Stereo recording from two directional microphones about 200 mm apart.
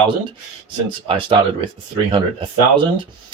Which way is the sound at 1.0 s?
25° right (ahead or behind).